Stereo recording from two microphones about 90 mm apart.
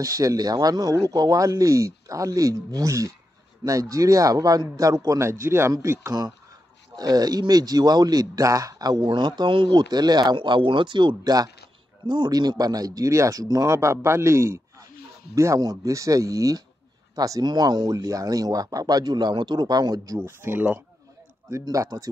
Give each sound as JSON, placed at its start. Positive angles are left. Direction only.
{"t": 0.0, "sound": "speech", "side_deg": -40}
{"t": 7.0, "sound": "speech", "side_deg": -45}
{"t": 10.3, "sound": "speech", "side_deg": -65}
{"t": 20.2, "sound": "speech", "side_deg": -25}
{"t": 21.6, "sound": "speech", "side_deg": -40}